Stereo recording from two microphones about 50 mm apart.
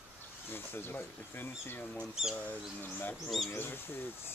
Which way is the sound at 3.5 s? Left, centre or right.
Left.